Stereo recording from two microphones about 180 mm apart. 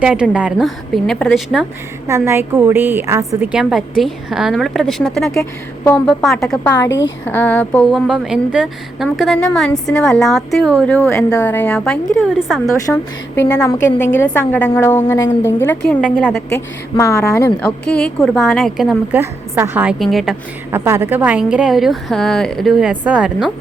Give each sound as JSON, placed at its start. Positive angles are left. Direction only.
{"t": 0.0, "sound": "a woman's voice", "side_deg": -5}
{"t": 2.0, "sound": "a woman's voice", "side_deg": -15}
{"t": 5.8, "sound": "a woman's voice", "side_deg": 15}
{"t": 6.2, "sound": "a woman's voice", "side_deg": 0}
{"t": 14.2, "sound": "a woman's voice", "side_deg": 10}
{"t": 16.1, "sound": "a woman's voice", "side_deg": -5}
{"t": 17.0, "sound": "a woman's voice", "side_deg": 15}
{"t": 17.8, "sound": "a woman's voice", "side_deg": 5}
{"t": 19.2, "sound": "a woman's voice", "side_deg": -15}
{"t": 20.7, "sound": "a woman's voice", "side_deg": -15}